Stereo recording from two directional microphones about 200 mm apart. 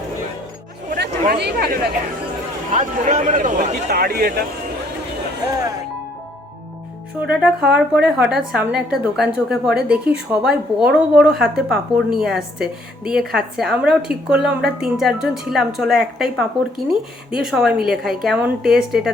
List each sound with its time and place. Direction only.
0.9 s a sound: 55° right (ahead or behind)
2.7 s speech: 35° right (ahead or behind)
7.3 s a woman's voice: 5° right (ahead or behind)